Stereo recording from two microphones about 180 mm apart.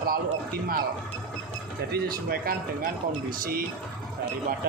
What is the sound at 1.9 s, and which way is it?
A man's voice, 60° right (ahead or behind).